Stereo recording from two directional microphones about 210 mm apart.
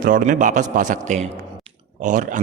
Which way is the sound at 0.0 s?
40° right (ahead or behind).